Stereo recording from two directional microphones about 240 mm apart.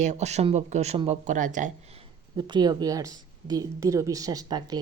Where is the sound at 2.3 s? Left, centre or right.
Centre.